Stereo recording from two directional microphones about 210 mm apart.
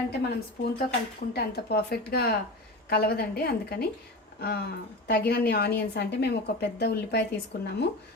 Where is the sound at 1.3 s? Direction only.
50° left (ahead or behind).